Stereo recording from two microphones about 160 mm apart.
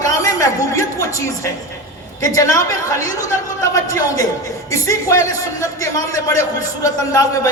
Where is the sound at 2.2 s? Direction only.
20° left (ahead or behind).